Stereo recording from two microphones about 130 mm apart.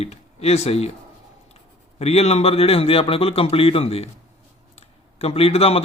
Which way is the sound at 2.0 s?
55° left (ahead or behind).